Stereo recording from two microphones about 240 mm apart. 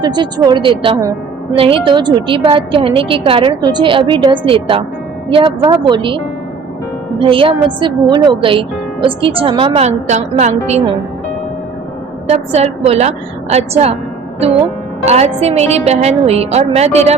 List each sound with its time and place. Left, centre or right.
0.0 s speech: centre
7.2 s speech: right
12.3 s speech: right
15.0 s speech: right